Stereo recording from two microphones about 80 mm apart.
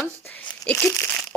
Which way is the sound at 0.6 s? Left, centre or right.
Centre.